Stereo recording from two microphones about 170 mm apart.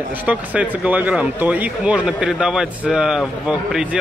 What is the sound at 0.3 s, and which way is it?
A man's voice, 10° right (ahead or behind).